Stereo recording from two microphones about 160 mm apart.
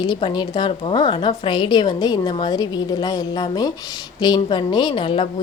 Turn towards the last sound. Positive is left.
turn(degrees=35)  # may be behind; listen again after turning